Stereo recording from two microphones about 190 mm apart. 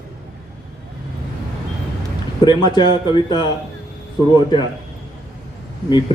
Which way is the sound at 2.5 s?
20° left (ahead or behind).